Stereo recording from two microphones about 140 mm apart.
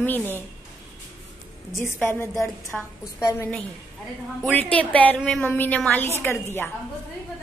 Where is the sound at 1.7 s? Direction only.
15° left (ahead or behind).